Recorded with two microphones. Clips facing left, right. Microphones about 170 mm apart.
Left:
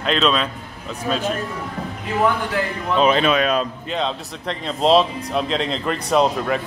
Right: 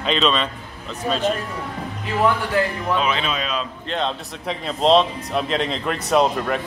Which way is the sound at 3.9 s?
Centre (ahead or behind).